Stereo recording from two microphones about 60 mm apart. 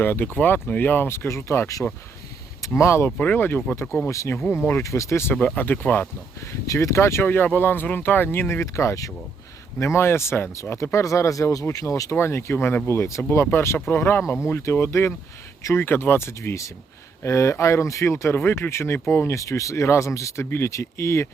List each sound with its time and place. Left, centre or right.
0.0 s speech: left
2.6 s speech: left
3.2 s speech: left
4.8 s speech: left
5.5 s speech: left
6.4 s speech: left
7.4 s speech: left
8.6 s speech: left
10.9 s speech: left
12.1 s speech: left
12.9 s speech: left
20.7 s speech: left